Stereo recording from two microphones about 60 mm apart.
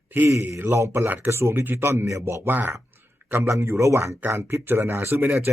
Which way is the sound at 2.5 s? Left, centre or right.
Right.